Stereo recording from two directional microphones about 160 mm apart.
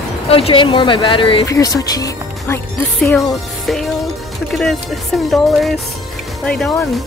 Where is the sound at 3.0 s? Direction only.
Centre (ahead or behind).